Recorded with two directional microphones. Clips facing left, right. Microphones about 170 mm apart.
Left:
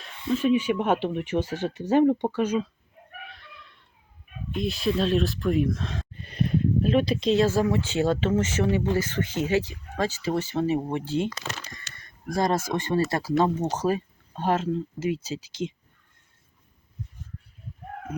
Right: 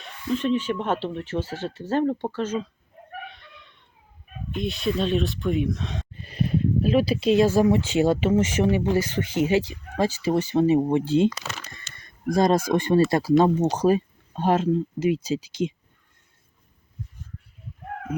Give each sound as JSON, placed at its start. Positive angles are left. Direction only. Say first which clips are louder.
{"t": 0.3, "sound": "speech", "louder": "left 2 dB", "side_deg": 10}
{"t": 3.2, "sound": "a sound", "louder": "right 3 dB", "side_deg": 0}
{"t": 4.5, "sound": "speech", "louder": "even", "side_deg": 0}